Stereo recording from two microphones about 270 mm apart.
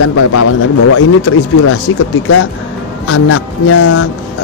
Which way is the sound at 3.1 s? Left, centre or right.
Left.